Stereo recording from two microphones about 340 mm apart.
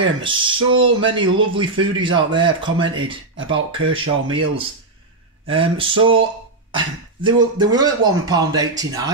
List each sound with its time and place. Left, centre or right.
0.0 s speech: centre